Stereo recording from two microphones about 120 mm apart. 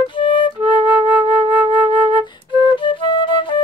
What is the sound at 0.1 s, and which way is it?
Flute, 45° left (ahead or behind).